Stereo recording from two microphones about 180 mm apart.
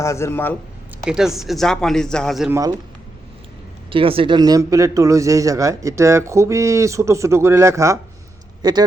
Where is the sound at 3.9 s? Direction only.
30° right (ahead or behind).